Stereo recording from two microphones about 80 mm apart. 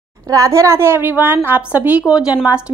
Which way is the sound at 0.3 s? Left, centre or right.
Right.